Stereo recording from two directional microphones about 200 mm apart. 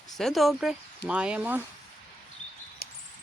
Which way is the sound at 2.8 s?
50° left (ahead or behind).